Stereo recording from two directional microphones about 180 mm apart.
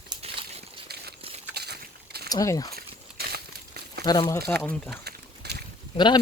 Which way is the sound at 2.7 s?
60° right (ahead or behind).